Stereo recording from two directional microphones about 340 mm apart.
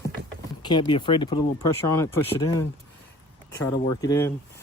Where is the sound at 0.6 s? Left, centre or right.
Centre.